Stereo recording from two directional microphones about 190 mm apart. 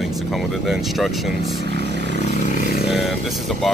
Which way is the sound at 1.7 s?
65° right (ahead or behind).